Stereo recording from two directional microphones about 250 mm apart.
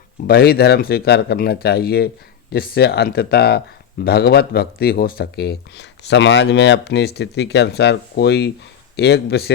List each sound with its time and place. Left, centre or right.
0.3 s speech: left